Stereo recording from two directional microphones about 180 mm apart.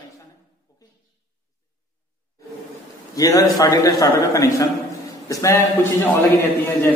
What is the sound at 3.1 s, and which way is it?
A man's voice, 20° left (ahead or behind).